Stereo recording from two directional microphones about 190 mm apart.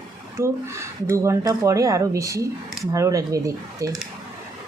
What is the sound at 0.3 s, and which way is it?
A woman's voice, 15° right (ahead or behind).